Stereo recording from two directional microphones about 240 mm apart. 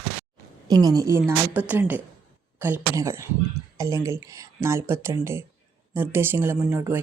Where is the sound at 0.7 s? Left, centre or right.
Centre.